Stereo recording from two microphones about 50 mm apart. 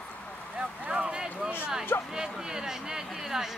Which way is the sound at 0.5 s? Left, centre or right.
Right.